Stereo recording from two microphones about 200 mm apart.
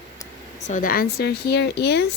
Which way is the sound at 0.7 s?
45° left (ahead or behind).